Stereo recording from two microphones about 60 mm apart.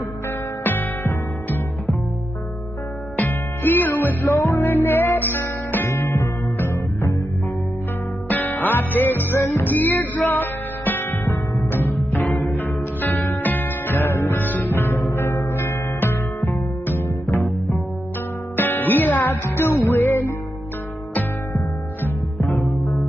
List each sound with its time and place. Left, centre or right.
0.7 s music: left
3.2 s music: left
8.3 s music: left
18.6 s music: left
22.6 s music: centre